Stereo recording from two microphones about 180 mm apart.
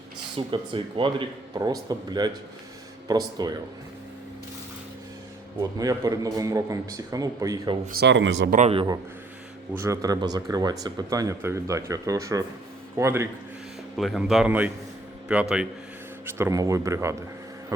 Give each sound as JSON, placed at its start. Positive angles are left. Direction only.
{"t": 0.3, "sound": "speech", "side_deg": -30}
{"t": 5.5, "sound": "speech", "side_deg": -20}
{"t": 7.9, "sound": "speech", "side_deg": -65}
{"t": 8.5, "sound": "a man's voice", "side_deg": -35}
{"t": 9.7, "sound": "a man's voice", "side_deg": -15}
{"t": 13.9, "sound": "a man's voice", "side_deg": 0}
{"t": 16.2, "sound": "a man's voice", "side_deg": -15}